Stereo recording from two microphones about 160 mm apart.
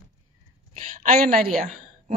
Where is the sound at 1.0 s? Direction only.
60° right (ahead or behind).